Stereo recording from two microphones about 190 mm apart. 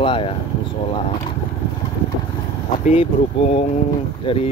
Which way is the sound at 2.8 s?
35° left (ahead or behind).